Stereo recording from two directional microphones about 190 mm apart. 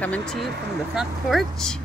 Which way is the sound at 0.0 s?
5° left (ahead or behind).